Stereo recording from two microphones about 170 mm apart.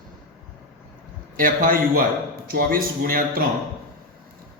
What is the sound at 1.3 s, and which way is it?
A man's voice, 55° right (ahead or behind).